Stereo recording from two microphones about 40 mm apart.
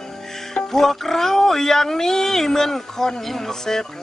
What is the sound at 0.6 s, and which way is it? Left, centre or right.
Speech, centre.